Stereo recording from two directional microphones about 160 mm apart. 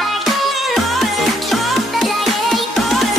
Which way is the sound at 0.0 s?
Centre (ahead or behind).